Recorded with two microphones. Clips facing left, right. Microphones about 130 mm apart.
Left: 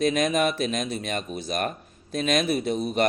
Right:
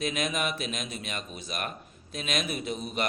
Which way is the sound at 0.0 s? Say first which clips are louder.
Left 8 dB; 40° left (ahead or behind).